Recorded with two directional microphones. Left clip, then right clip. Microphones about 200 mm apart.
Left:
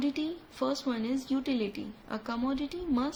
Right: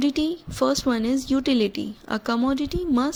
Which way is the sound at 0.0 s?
45° right (ahead or behind).